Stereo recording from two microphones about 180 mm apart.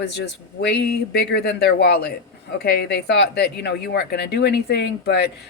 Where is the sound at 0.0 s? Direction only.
65° left (ahead or behind).